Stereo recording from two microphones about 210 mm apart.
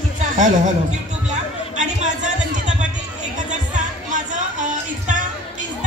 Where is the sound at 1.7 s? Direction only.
35° right (ahead or behind).